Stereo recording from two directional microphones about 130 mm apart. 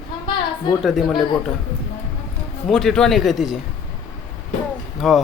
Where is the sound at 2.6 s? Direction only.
5° left (ahead or behind).